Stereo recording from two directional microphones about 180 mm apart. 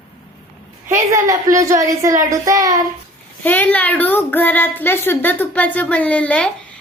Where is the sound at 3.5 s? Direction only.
10° left (ahead or behind).